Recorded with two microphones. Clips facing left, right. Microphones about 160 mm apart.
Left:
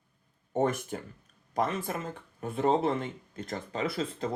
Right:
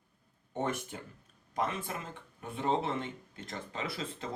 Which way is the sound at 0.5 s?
40° left (ahead or behind).